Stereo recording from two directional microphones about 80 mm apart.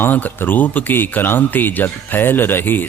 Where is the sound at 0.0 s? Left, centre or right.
Left.